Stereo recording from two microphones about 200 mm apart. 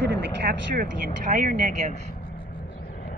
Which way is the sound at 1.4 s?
40° right (ahead or behind).